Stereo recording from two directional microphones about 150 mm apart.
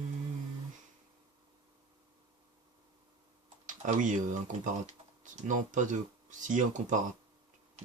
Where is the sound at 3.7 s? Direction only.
55° right (ahead or behind).